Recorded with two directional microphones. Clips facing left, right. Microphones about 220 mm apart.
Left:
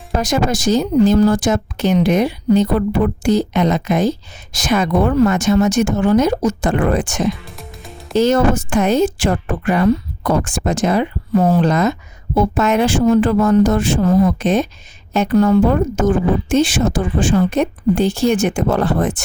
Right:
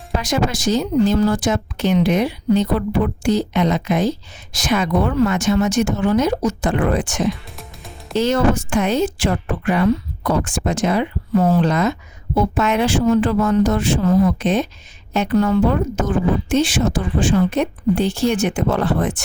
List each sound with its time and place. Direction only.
0.2 s a woman's voice: 45° left (ahead or behind)